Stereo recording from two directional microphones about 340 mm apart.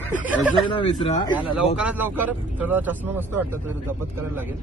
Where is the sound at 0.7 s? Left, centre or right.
Centre.